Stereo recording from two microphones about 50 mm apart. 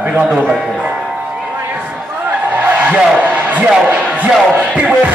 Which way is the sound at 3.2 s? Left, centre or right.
Right.